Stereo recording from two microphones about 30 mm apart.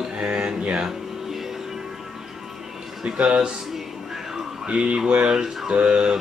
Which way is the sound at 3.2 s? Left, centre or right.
Right.